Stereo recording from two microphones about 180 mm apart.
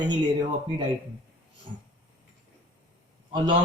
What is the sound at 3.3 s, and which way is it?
Speech, 25° right (ahead or behind).